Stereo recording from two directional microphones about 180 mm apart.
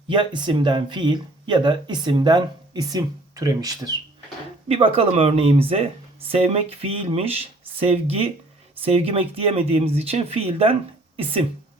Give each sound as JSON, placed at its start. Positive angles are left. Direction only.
{"t": 0.1, "sound": "speech", "side_deg": -25}
{"t": 4.7, "sound": "speech", "side_deg": -30}